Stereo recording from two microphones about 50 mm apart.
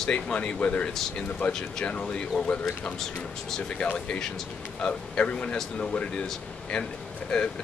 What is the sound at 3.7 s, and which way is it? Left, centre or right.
Speech, left.